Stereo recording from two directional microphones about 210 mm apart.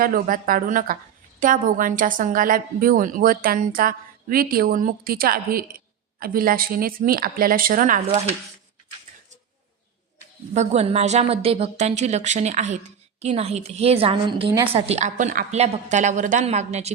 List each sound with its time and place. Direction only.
0.0 s a woman's voice: 40° right (ahead or behind)
10.5 s a woman's voice: 30° right (ahead or behind)